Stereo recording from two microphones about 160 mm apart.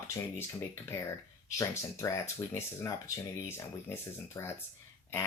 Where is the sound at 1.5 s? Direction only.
20° left (ahead or behind).